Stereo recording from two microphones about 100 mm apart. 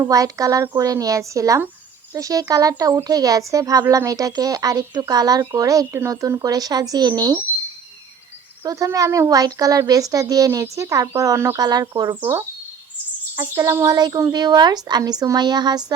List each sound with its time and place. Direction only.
0.1 s speech: 35° right (ahead or behind)
8.6 s speech: 35° right (ahead or behind)
13.3 s a woman's voice: 30° right (ahead or behind)